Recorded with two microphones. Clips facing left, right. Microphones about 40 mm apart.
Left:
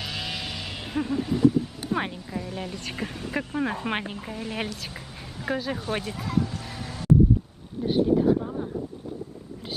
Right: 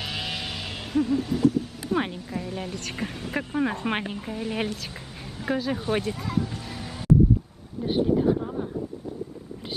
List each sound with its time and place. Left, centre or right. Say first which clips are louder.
0.0 s vehicle: right 1 dB; centre
0.9 s speech: right 3 dB; centre
2.0 s speech: right 4 dB; centre
7.8 s speech: left 1 dB; centre